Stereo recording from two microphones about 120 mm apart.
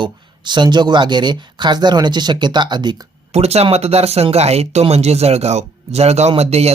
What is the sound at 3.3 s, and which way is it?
Speech, 60° right (ahead or behind).